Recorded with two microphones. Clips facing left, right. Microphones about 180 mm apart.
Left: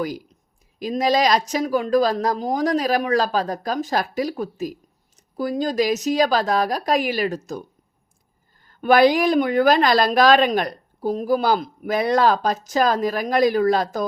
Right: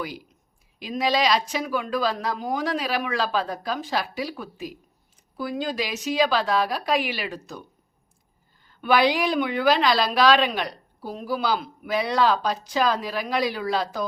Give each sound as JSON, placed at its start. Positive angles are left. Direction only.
{"t": 0.8, "sound": "a woman's voice", "side_deg": 45}
{"t": 8.6, "sound": "a woman's voice", "side_deg": 45}